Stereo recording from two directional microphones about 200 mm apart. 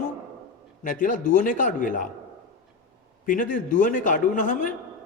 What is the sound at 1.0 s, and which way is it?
A man's voice, 40° left (ahead or behind).